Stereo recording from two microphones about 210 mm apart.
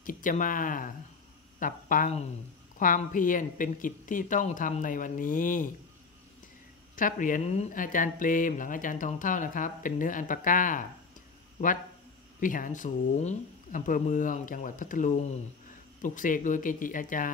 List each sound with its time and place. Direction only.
0.0 s speech: 40° left (ahead or behind)
7.0 s speech: 40° left (ahead or behind)
12.4 s speech: 40° left (ahead or behind)